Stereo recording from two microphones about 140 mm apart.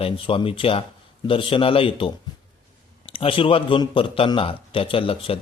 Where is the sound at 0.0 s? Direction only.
40° left (ahead or behind).